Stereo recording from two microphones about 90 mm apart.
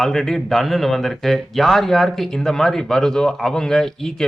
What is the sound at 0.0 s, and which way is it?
Speech, 5° left (ahead or behind).